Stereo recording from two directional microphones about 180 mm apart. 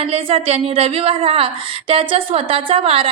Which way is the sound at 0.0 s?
30° right (ahead or behind).